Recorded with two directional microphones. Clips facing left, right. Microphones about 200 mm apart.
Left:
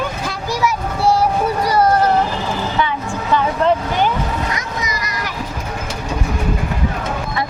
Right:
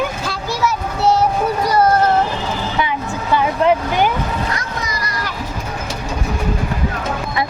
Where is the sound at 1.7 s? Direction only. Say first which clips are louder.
Even; 10° left (ahead or behind).